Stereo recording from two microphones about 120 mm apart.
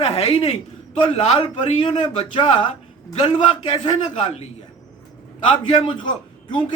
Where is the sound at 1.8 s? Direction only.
45° left (ahead or behind).